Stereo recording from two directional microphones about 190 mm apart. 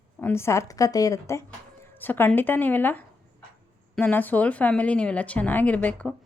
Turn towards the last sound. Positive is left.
turn(degrees=5)  # may be behind; listen again after turning